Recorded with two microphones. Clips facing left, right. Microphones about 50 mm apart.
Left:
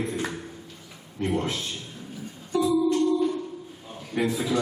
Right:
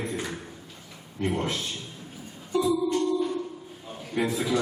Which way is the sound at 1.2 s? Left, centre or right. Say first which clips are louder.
Left 1 dB; centre.